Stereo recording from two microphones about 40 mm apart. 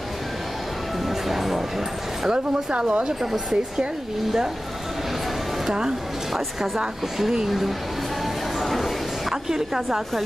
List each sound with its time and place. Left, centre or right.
1.3 s music: centre
2.7 s speech: right
3.2 s a woman's voice: centre
5.7 s a woman's voice: centre
7.2 s a woman's voice: centre
8.5 s a sound: centre
9.3 s a woman's voice: centre